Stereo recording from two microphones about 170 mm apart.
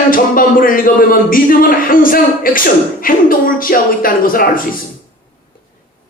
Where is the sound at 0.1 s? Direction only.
55° left (ahead or behind).